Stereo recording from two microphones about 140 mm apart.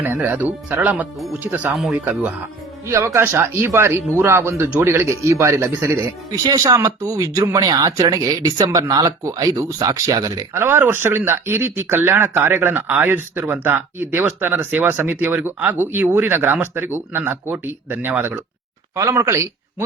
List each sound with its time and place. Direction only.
0.0 s speech: 10° right (ahead or behind)
2.8 s speech: 20° right (ahead or behind)
6.4 s speech: 25° right (ahead or behind)